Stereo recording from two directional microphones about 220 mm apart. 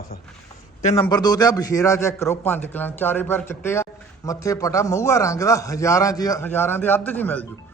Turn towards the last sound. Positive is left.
turn(degrees=5)  # may be behind; listen again after turning